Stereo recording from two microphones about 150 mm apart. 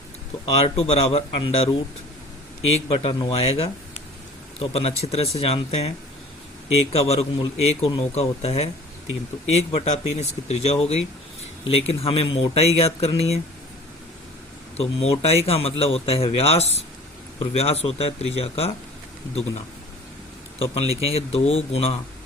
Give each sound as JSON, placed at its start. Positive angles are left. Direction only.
{"t": 0.4, "sound": "speech", "side_deg": 40}
{"t": 3.2, "sound": "speech", "side_deg": 40}
{"t": 6.9, "sound": "speech", "side_deg": 40}
{"t": 14.8, "sound": "speech", "side_deg": 40}